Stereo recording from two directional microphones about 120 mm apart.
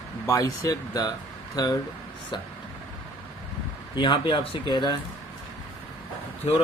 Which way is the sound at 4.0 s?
40° left (ahead or behind).